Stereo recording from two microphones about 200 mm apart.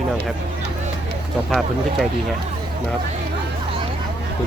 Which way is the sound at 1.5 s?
Centre (ahead or behind).